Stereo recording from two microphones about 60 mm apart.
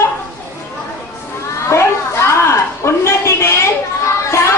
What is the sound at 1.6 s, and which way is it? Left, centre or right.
A woman's voice, left.